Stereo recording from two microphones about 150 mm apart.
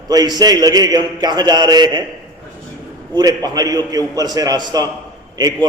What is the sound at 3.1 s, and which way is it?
A man's voice, 25° right (ahead or behind).